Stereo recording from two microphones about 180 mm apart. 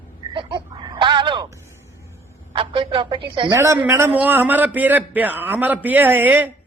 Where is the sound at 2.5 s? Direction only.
30° right (ahead or behind).